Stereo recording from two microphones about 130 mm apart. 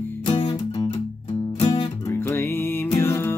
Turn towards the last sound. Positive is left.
turn(degrees=15)  # may be behind; listen again after turning